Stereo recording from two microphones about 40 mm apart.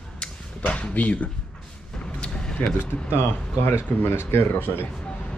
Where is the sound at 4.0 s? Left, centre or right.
Left.